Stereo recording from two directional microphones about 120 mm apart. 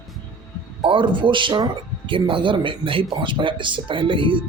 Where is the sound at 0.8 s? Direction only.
45° right (ahead or behind).